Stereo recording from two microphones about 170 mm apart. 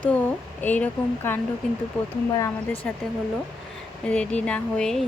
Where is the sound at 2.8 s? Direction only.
5° left (ahead or behind).